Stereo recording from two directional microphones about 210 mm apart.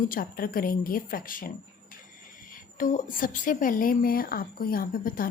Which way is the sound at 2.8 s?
40° left (ahead or behind).